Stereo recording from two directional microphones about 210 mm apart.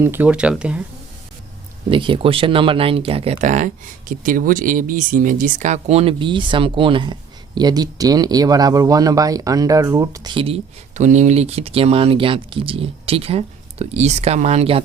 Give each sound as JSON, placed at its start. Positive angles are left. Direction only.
{"t": 0.0, "sound": "speech", "side_deg": -10}
{"t": 1.9, "sound": "speech", "side_deg": -25}